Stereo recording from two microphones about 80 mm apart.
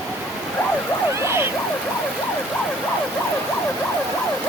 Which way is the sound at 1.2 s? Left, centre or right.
Right.